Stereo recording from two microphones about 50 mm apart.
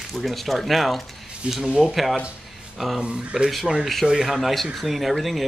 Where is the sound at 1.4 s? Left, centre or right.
Right.